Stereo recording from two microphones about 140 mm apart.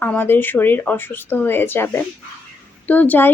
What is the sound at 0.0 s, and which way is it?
Speech, 15° left (ahead or behind).